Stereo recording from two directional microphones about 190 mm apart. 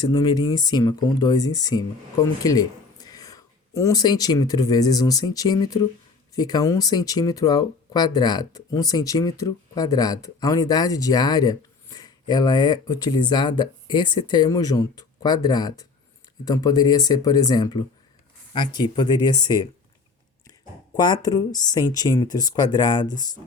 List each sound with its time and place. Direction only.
0.1 s speech: 25° left (ahead or behind)
20.9 s speech: 20° left (ahead or behind)